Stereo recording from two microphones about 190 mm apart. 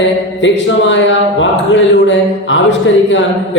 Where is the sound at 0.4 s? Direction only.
75° left (ahead or behind).